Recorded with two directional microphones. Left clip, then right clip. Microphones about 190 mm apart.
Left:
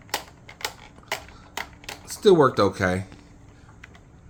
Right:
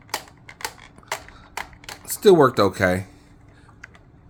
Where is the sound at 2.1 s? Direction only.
35° right (ahead or behind).